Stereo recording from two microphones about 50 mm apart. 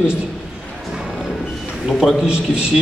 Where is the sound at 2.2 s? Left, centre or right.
Centre.